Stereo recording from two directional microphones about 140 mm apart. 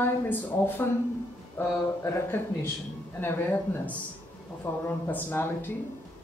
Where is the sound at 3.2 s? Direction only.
15° left (ahead or behind).